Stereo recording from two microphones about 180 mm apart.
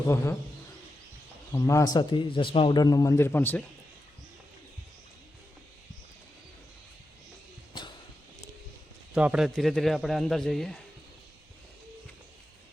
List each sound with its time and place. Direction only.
1.5 s a man's voice: 20° left (ahead or behind)
9.1 s a man's voice: 5° right (ahead or behind)